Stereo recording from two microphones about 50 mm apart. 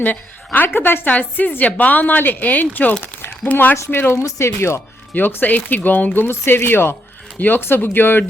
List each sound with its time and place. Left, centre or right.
0.0 s a woman's voice: left
3.0 s a sound: left
3.5 s a woman's voice: left
3.9 s speech: left
4.2 s speech: left
5.1 s a woman's voice: left
6.2 s a woman's voice: left